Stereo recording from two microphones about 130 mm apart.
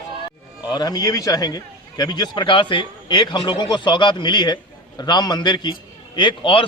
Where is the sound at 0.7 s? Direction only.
30° left (ahead or behind).